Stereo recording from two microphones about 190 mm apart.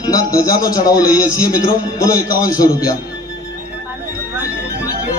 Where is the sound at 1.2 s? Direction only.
15° left (ahead or behind).